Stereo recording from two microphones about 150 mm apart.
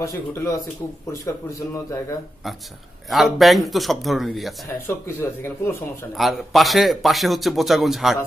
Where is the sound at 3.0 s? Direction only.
Centre (ahead or behind).